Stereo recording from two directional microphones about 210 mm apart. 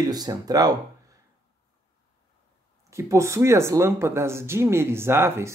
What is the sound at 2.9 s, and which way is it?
Speech, 15° right (ahead or behind).